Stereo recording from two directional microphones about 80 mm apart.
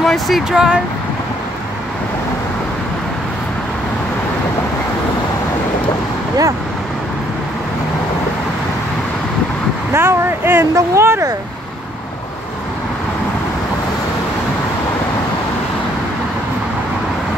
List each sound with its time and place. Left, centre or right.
0.0 s speech: centre
0.5 s speech: centre
9.9 s speech: right